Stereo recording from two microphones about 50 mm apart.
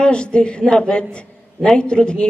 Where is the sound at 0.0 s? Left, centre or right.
Centre.